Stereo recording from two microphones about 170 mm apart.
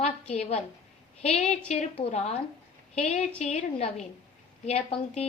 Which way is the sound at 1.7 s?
40° left (ahead or behind).